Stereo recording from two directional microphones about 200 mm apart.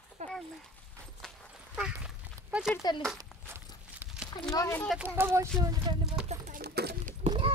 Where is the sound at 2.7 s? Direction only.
20° left (ahead or behind).